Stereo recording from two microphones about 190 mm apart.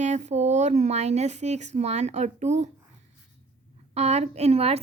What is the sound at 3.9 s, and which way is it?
Speech, 35° right (ahead or behind).